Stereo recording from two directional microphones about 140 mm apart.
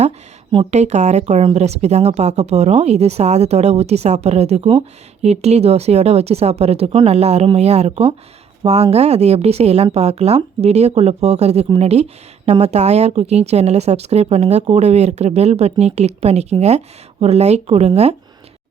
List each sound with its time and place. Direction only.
0.5 s speech: 45° right (ahead or behind)